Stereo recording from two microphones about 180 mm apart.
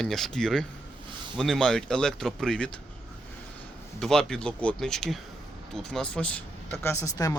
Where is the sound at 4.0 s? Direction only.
5° left (ahead or behind).